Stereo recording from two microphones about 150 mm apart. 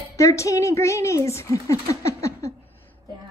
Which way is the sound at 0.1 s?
20° left (ahead or behind).